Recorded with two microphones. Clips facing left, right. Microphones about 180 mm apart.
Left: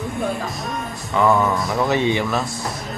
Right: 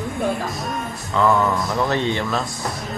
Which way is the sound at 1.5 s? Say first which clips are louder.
Even; centre (ahead or behind).